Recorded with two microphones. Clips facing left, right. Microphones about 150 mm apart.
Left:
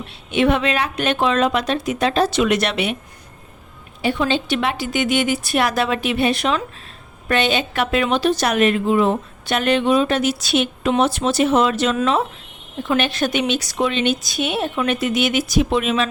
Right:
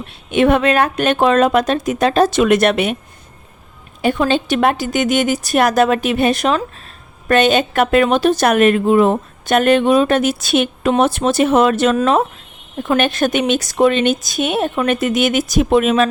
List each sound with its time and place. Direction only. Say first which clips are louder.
0.3 s a woman's voice: right 4 dB; 50° right (ahead or behind)
4.0 s a woman's voice: right 4 dB; 50° right (ahead or behind)